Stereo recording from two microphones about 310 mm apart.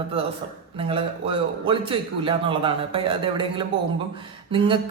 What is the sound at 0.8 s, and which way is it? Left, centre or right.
A man's voice, centre.